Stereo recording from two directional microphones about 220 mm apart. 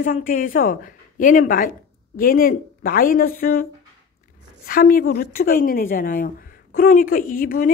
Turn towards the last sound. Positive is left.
turn(degrees=40)  # may be behind; listen again after turning